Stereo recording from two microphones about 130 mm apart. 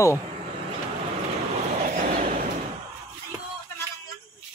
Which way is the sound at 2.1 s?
85° right.